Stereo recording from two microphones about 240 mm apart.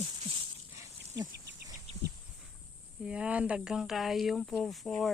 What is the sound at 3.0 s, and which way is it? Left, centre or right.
Speech, centre.